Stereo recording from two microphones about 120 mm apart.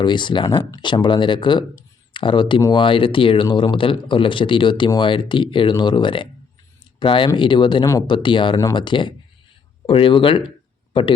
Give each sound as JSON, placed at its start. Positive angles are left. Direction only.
{"t": 0.0, "sound": "speech", "side_deg": 40}